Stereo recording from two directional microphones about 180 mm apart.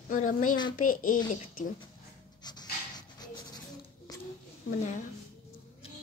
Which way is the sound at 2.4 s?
25° left (ahead or behind).